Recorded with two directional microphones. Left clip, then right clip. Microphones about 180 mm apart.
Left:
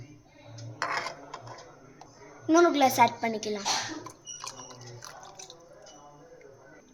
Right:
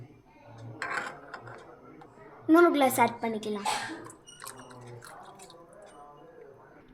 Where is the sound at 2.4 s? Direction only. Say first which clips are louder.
Even; 5° right (ahead or behind).